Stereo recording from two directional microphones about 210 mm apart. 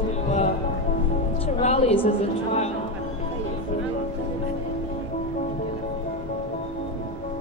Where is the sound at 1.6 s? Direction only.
30° left (ahead or behind).